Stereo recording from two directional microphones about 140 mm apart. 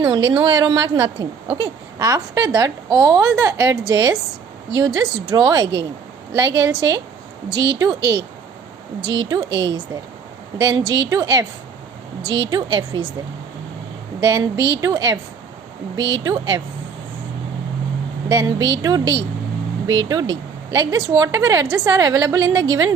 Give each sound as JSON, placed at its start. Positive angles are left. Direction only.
{"t": 0.0, "sound": "a woman's voice", "side_deg": -30}
{"t": 12.5, "sound": "a woman's voice", "side_deg": -30}
{"t": 14.2, "sound": "a woman's voice", "side_deg": -25}
{"t": 18.3, "sound": "a woman's voice", "side_deg": -25}